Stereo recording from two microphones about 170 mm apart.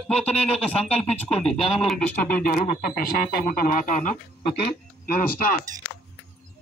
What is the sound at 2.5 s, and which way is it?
Speech, 60° left (ahead or behind).